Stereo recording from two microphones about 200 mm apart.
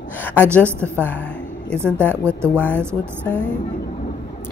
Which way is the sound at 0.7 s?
10° right (ahead or behind).